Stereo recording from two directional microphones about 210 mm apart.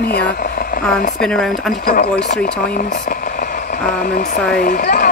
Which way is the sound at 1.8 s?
45° left (ahead or behind).